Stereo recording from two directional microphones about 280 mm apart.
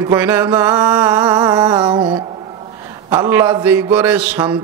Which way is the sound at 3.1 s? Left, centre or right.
Centre.